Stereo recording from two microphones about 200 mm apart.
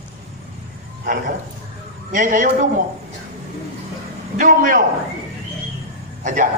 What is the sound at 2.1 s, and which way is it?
Speech, 40° right (ahead or behind).